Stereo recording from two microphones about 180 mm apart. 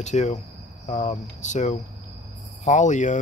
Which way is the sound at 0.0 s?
40° left (ahead or behind).